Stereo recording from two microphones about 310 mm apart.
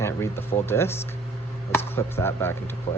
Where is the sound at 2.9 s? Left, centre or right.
Left.